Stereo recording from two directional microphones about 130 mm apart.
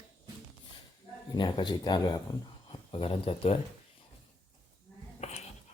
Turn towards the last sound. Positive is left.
turn(degrees=55)  # may be behind; listen again after turning